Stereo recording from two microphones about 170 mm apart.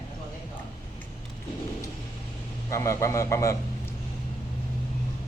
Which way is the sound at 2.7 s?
15° left (ahead or behind).